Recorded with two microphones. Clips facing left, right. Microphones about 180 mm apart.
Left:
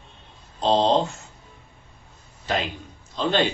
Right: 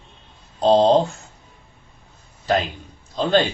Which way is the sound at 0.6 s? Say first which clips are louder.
Right 5 dB; 45° right (ahead or behind).